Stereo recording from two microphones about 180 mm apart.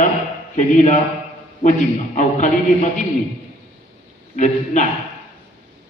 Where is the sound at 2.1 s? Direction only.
40° left (ahead or behind).